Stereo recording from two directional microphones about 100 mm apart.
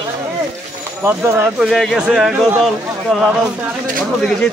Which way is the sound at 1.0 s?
20° right (ahead or behind).